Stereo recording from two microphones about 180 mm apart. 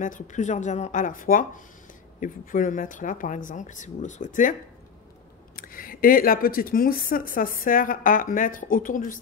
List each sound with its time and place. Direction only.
0.0 s speech: 45° left (ahead or behind)
5.6 s speech: 50° left (ahead or behind)